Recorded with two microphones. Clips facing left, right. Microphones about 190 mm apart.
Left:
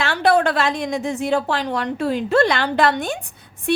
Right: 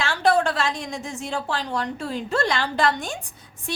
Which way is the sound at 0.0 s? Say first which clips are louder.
Left 3 dB; 60° left (ahead or behind).